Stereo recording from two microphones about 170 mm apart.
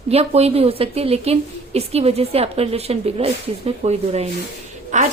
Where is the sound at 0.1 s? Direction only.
35° right (ahead or behind).